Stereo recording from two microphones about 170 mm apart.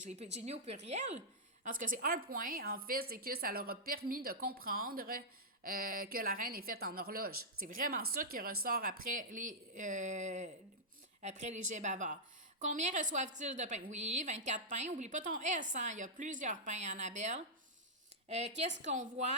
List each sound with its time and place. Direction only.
0.0 s a woman's voice: 40° right (ahead or behind)